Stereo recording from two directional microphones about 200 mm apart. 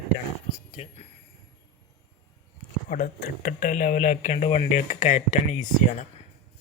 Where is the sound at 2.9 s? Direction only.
50° left (ahead or behind).